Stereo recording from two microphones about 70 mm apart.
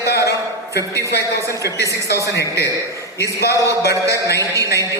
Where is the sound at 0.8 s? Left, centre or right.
Right.